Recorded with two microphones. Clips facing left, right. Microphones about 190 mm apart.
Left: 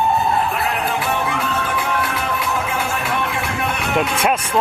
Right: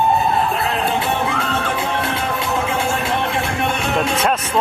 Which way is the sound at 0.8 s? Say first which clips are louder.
Right 2 dB; 25° right (ahead or behind).